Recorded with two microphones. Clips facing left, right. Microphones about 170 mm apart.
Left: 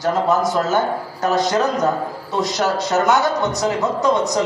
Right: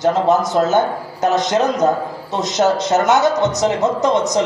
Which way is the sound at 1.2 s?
20° right (ahead or behind).